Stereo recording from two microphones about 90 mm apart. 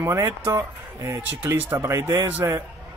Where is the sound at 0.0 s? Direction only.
30° right (ahead or behind).